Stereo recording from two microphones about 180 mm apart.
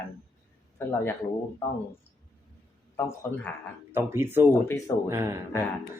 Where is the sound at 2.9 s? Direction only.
15° left (ahead or behind).